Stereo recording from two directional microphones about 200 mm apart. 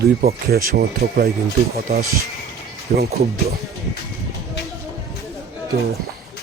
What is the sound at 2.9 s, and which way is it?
Speech, 50° right (ahead or behind).